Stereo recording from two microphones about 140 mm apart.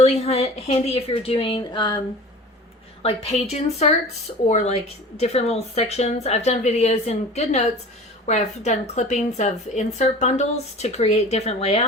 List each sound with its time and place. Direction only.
0.0 s a woman's voice: 50° left (ahead or behind)
3.0 s a woman's voice: 45° left (ahead or behind)